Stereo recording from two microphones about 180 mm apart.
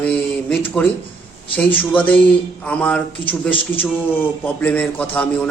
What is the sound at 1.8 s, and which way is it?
A man's voice, 10° left (ahead or behind).